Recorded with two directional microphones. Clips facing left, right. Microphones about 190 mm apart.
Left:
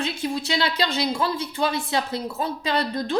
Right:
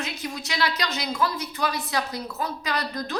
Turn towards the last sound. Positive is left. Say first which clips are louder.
# left 5 dB
turn(degrees=30)  # may be behind; listen again after turning